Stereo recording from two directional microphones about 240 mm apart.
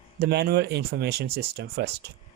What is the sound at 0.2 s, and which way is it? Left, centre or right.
Speech, right.